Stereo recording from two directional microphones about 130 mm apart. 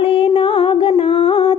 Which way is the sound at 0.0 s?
45° left (ahead or behind).